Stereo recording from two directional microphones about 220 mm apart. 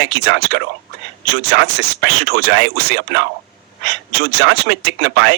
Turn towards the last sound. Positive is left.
turn(degrees=-50)  # may be behind; listen again after turning